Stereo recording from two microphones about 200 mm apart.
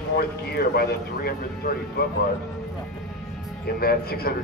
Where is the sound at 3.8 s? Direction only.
50° left (ahead or behind).